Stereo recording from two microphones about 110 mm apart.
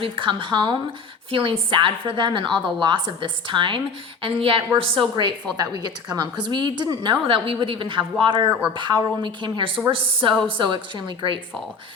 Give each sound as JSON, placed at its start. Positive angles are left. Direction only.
{"t": 0.0, "sound": "a woman's voice", "side_deg": -50}